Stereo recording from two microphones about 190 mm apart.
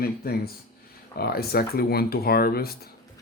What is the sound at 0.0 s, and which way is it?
Speech, 55° left (ahead or behind).